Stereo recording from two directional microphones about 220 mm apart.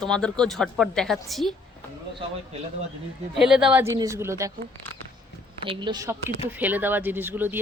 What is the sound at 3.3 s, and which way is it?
A woman's voice, 5° right (ahead or behind).